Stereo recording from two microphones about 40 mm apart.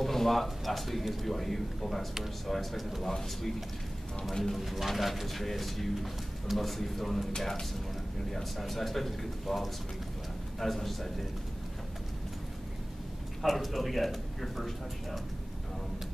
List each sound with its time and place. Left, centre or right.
0.0 s speech: centre
4.6 s speech: centre
7.3 s speech: centre
8.3 s speech: centre
13.4 s speech: centre